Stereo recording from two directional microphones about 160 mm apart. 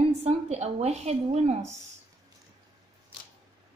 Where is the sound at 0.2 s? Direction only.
40° right (ahead or behind).